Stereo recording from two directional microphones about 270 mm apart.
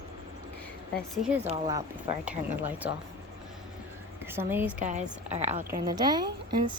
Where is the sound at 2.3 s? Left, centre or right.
Centre.